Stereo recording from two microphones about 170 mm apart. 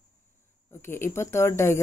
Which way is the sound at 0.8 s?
15° left (ahead or behind).